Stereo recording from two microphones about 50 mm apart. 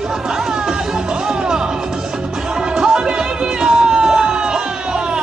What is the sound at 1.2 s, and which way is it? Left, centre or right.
Music, centre.